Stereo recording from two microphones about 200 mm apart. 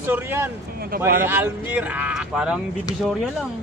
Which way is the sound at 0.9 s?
45° right (ahead or behind).